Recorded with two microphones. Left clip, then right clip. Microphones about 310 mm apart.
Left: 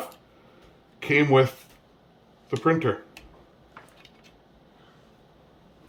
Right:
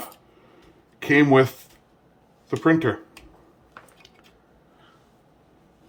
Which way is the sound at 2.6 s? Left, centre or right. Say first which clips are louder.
Right 3 dB; centre.